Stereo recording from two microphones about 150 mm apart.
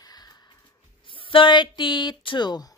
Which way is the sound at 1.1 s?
35° left (ahead or behind).